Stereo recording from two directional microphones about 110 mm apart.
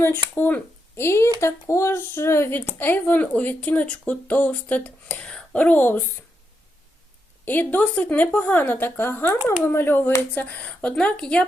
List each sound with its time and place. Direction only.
0.0 s speech: 15° left (ahead or behind)
7.4 s speech: 15° left (ahead or behind)